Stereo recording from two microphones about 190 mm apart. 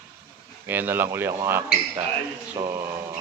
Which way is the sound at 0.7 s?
10° right (ahead or behind).